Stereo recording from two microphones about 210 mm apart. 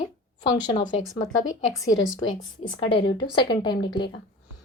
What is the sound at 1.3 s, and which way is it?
Speech, 70° left (ahead or behind).